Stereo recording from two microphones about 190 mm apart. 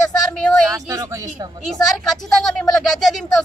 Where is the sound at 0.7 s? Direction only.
15° right (ahead or behind).